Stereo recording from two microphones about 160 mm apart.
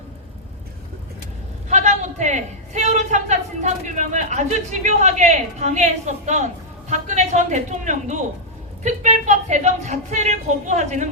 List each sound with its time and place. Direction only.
1.7 s a man's voice: 50° right (ahead or behind)